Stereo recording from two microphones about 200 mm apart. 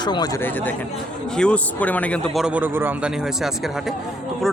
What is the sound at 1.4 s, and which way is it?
Speech, 5° left (ahead or behind).